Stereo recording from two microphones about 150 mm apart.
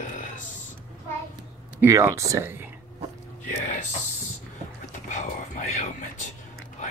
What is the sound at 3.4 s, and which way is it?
Speech, 55° left (ahead or behind).